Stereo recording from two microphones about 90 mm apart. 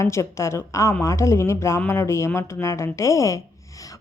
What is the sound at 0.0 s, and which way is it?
A woman's voice, 35° left (ahead or behind).